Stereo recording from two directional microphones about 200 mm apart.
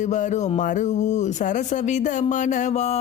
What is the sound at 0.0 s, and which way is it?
A man's voice, 40° left (ahead or behind).